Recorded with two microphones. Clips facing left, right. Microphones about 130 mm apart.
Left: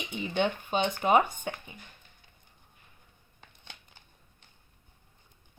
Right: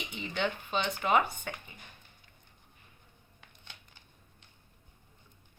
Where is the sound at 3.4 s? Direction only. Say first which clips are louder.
Left 3 dB; 35° left (ahead or behind).